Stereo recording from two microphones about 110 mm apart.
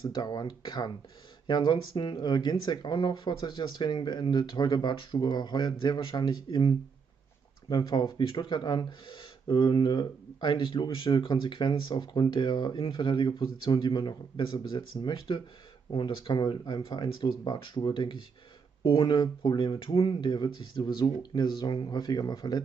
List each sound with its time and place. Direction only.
0.0 s speech: 40° left (ahead or behind)
7.7 s speech: 40° left (ahead or behind)